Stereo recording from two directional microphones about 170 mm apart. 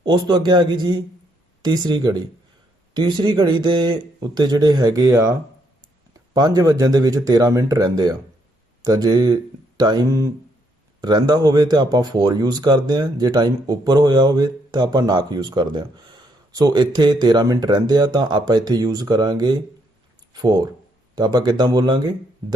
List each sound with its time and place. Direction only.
0.0 s speech: 25° right (ahead or behind)